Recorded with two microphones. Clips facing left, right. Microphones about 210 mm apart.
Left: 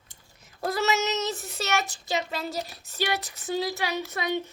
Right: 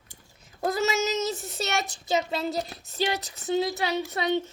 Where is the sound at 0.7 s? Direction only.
30° right (ahead or behind).